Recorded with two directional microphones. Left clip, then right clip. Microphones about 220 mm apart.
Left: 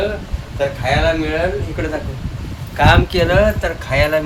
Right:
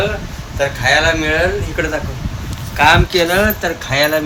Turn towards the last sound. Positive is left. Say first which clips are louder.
# right 1 dB
turn(degrees=-5)  # may be behind; listen again after turning